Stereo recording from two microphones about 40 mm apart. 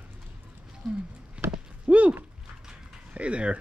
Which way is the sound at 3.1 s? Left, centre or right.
Right.